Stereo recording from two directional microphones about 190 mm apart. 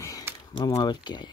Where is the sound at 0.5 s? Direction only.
20° left (ahead or behind).